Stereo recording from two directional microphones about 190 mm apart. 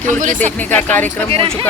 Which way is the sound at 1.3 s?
30° right (ahead or behind).